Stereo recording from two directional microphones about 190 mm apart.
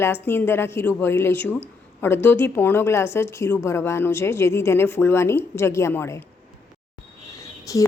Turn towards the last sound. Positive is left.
turn(degrees=15)  # may be behind; listen again after turning